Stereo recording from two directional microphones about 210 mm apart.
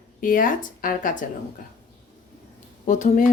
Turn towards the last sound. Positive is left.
turn(degrees=35)  # may be behind; listen again after turning